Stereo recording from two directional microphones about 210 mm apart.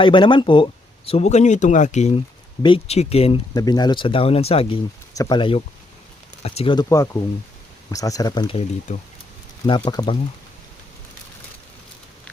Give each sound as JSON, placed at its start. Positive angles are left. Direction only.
{"t": 0.0, "sound": "speech", "side_deg": 25}